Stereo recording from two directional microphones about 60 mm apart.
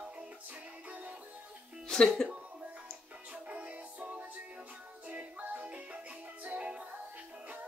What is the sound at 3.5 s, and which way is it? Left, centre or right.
Music, right.